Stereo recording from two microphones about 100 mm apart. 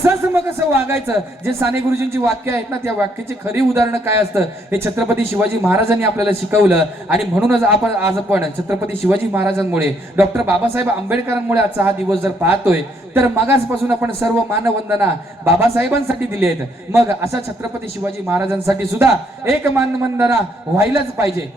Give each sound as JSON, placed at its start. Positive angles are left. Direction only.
{"t": 0.7, "sound": "a man's voice", "side_deg": -25}